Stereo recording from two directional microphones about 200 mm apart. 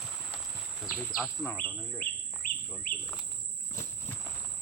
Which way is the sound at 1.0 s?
5° left (ahead or behind).